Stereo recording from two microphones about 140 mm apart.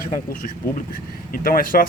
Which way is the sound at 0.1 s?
80° left.